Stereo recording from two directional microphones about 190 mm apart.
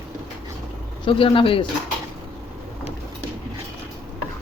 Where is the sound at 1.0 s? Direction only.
30° left (ahead or behind).